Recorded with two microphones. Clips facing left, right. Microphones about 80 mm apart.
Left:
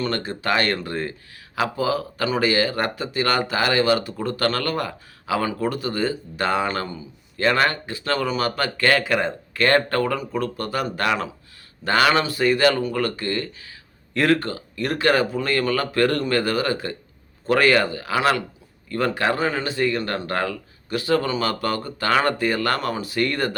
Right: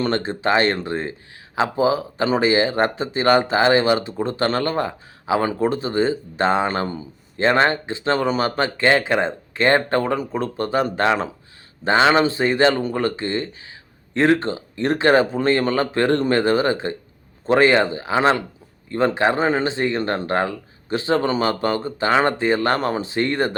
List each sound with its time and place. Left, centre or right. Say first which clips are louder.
0.0 s speech: right 4 dB; right